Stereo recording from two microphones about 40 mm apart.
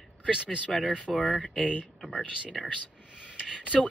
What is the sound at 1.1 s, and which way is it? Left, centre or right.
Speech, left.